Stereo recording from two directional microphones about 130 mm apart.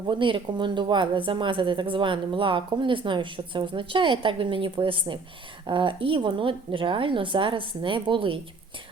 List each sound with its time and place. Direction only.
0.1 s a woman's voice: 40° right (ahead or behind)